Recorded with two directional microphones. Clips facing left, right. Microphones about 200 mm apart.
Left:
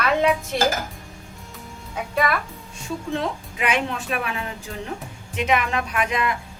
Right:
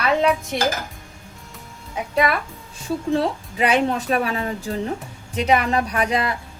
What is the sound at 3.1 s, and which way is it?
A woman's voice, 35° right (ahead or behind).